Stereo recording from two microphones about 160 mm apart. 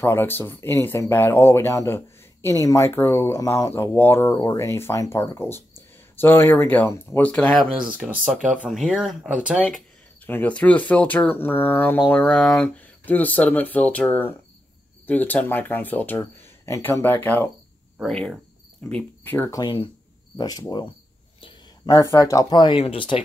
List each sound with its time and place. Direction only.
0.0 s speech: 15° left (ahead or behind)
7.7 s speech: 10° right (ahead or behind)
10.2 s speech: 10° left (ahead or behind)
19.6 s speech: 30° left (ahead or behind)